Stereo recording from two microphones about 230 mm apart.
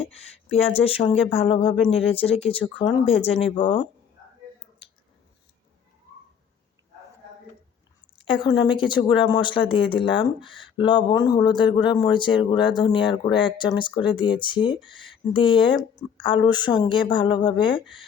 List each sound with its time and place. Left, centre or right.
0.5 s speech: left
8.2 s speech: left